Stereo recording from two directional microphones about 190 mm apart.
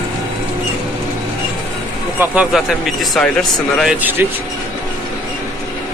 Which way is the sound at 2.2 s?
5° right (ahead or behind).